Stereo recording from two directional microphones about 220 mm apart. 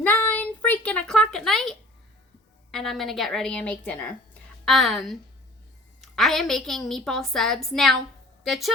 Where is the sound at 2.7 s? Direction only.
Centre (ahead or behind).